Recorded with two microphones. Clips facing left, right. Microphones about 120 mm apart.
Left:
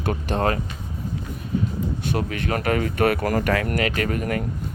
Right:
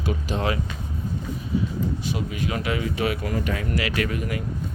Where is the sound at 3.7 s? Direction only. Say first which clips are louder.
Left 2 dB; 45° left (ahead or behind).